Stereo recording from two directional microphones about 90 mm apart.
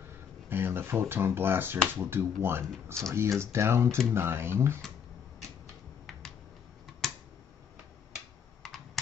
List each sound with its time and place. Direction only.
0.5 s speech: 25° right (ahead or behind)
7.0 s a sound: centre (ahead or behind)
8.6 s computer keyboard: 5° left (ahead or behind)